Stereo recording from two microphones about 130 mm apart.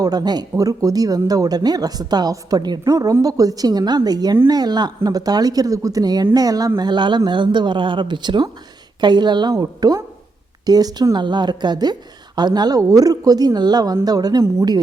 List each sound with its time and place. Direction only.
0.0 s speech: 30° right (ahead or behind)